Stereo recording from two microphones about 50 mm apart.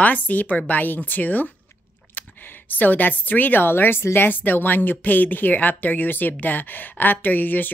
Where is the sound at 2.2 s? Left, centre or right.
Left.